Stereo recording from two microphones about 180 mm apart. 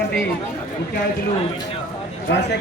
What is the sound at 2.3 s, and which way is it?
Speech, 75° left (ahead or behind).